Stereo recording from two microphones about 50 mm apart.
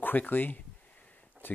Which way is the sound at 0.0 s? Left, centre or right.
Left.